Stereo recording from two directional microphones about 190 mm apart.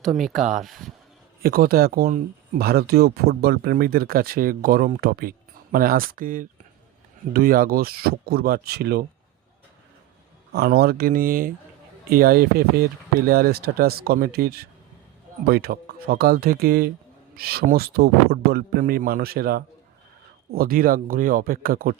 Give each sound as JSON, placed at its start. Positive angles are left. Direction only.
{"t": 0.0, "sound": "speech", "side_deg": 0}
{"t": 1.4, "sound": "speech", "side_deg": -50}
{"t": 10.5, "sound": "speech", "side_deg": -55}